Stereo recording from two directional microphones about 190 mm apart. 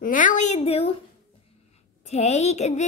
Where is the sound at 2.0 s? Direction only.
35° left (ahead or behind).